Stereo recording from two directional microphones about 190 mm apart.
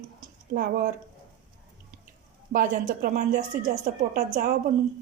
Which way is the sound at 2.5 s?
45° right (ahead or behind).